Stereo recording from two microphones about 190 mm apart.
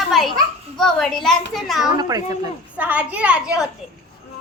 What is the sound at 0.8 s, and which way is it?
A child's voice, 5° left (ahead or behind).